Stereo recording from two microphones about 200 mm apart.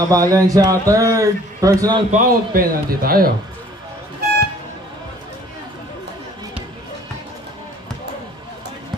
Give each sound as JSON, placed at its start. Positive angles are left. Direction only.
{"t": 0.0, "sound": "a man's voice", "side_deg": -20}
{"t": 2.0, "sound": "a man's voice", "side_deg": -45}